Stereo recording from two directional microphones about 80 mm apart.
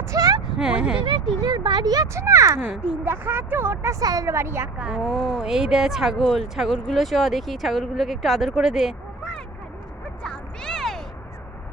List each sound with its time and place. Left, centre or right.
0.1 s a sound: right
0.5 s speech: centre
1.5 s speech: right
2.1 s speech: right
3.0 s speech: right
4.0 s speech: right
4.9 s speech: centre
10.2 s a sound: centre